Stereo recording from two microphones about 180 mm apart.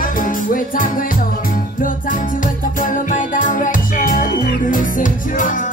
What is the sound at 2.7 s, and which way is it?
Music, 50° left (ahead or behind).